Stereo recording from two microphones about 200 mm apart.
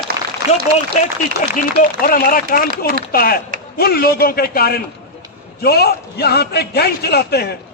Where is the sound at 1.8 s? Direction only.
45° left (ahead or behind).